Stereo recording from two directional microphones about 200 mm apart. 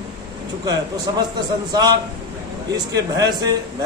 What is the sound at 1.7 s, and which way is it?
A man's voice, 20° right (ahead or behind).